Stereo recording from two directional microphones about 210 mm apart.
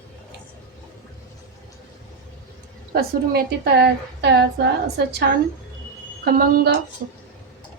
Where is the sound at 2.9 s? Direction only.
50° right (ahead or behind).